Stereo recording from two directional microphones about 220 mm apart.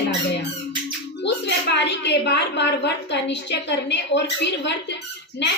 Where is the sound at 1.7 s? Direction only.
50° left (ahead or behind).